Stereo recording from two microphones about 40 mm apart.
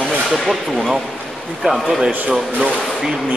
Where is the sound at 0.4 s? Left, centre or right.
Centre.